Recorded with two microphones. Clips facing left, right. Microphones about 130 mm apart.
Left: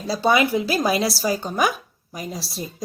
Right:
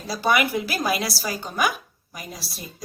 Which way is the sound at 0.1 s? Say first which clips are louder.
Left 3 dB; 25° left (ahead or behind).